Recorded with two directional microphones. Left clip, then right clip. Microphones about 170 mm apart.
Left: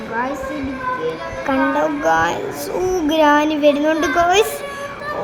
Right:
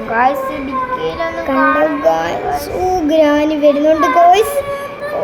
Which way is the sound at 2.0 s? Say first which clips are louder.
Right 2 dB; 25° left (ahead or behind).